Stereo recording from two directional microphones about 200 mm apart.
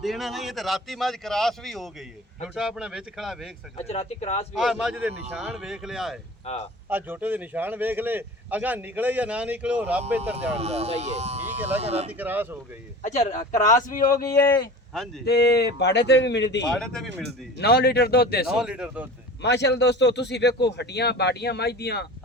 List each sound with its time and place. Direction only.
0.0 s a man's voice: centre (ahead or behind)
3.8 s speech: 30° left (ahead or behind)
4.5 s a man's voice: 5° right (ahead or behind)
10.5 s speech: 30° right (ahead or behind)
12.1 s speech: 10° right (ahead or behind)
13.0 s speech: 35° left (ahead or behind)
13.4 s speech: 15° left (ahead or behind)
13.8 s speech: 45° left (ahead or behind)
14.3 s speech: 15° left (ahead or behind)
15.2 s speech: 55° left (ahead or behind)
16.7 s a man's voice: 5° left (ahead or behind)
17.6 s speech: 55° left (ahead or behind)
18.4 s a man's voice: 5° right (ahead or behind)
19.4 s speech: 60° left (ahead or behind)